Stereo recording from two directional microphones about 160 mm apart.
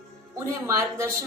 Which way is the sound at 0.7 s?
20° right (ahead or behind).